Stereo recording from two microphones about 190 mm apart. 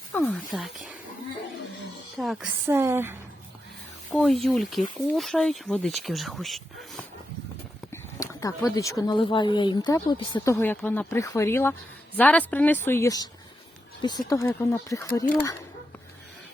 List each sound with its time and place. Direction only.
0.1 s speech: 10° left (ahead or behind)
0.5 s speech: centre (ahead or behind)
2.1 s speech: centre (ahead or behind)
2.6 s a woman's voice: 15° right (ahead or behind)
4.1 s speech: centre (ahead or behind)
8.2 s speech: 15° left (ahead or behind)
10.5 s a woman's voice: 10° left (ahead or behind)